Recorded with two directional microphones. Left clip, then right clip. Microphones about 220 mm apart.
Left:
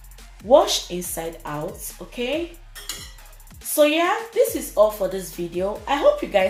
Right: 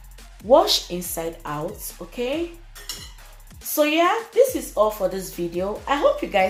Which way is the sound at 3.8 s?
25° right (ahead or behind).